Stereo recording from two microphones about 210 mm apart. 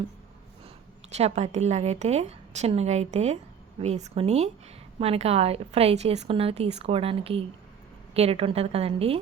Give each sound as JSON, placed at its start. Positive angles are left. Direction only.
{"t": 1.1, "sound": "a woman's voice", "side_deg": -30}